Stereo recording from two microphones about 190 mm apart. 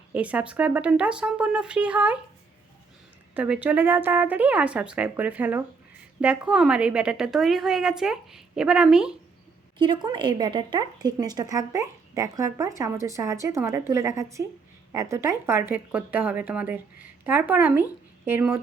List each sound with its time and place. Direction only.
0.1 s speech: 5° right (ahead or behind)
3.3 s a woman's voice: 10° right (ahead or behind)
9.7 s speech: 25° right (ahead or behind)